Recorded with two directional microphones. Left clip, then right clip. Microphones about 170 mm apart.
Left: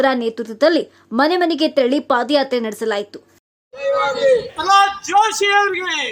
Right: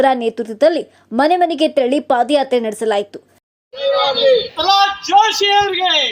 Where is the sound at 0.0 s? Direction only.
10° right (ahead or behind).